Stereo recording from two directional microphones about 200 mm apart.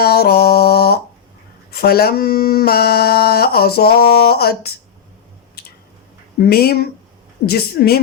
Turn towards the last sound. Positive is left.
turn(degrees=50)  # may be behind; listen again after turning